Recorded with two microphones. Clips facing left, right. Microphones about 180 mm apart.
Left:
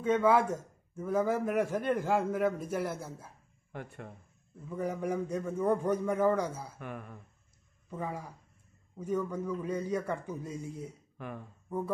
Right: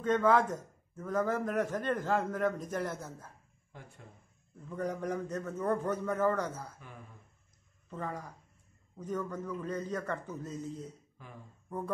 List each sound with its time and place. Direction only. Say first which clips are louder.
0.0 s a man's voice: left 1 dB; 10° left (ahead or behind)
3.7 s speech: left 9 dB; 65° left (ahead or behind)
4.6 s a man's voice: left 2 dB; 5° left (ahead or behind)
6.8 s speech: left 10 dB; 65° left (ahead or behind)
7.9 s a man's voice: left 2 dB; 10° left (ahead or behind)
11.1 s speech: left 9 dB; 65° left (ahead or behind)